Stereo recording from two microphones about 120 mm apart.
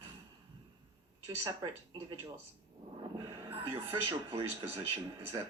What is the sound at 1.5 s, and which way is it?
Speech, 35° right (ahead or behind).